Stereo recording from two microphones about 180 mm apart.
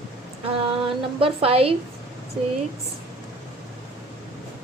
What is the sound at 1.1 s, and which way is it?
Speech, 30° right (ahead or behind).